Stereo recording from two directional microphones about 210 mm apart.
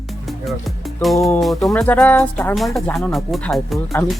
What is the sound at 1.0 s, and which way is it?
Speech, centre (ahead or behind).